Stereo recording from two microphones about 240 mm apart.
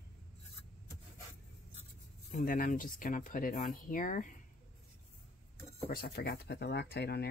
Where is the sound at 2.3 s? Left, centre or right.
Left.